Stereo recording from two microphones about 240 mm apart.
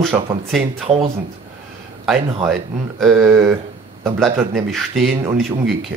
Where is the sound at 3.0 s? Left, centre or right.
Centre.